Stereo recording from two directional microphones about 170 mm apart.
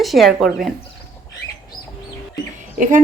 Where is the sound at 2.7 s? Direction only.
45° right (ahead or behind).